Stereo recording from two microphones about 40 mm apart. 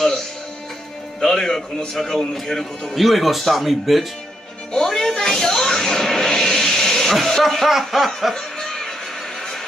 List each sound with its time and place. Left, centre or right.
1.2 s speech: centre
4.7 s a sound: centre
8.4 s music: centre